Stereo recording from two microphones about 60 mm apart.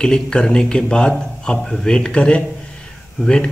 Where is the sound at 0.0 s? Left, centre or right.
Centre.